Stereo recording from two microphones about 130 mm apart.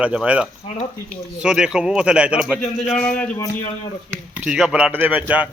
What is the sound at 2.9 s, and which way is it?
Speech, 10° left (ahead or behind).